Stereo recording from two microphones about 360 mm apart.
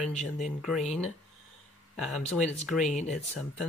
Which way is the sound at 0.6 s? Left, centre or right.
Centre.